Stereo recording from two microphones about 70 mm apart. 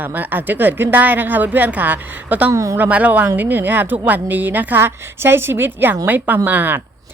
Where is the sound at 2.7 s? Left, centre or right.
Right.